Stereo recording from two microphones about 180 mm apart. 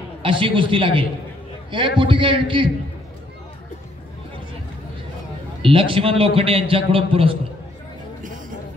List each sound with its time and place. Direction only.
0.2 s a man's voice: 30° right (ahead or behind)
5.6 s a man's voice: 30° right (ahead or behind)
8.2 s a sound: 45° right (ahead or behind)